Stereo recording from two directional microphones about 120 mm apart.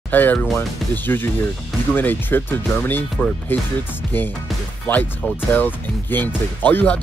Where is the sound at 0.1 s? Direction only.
15° left (ahead or behind).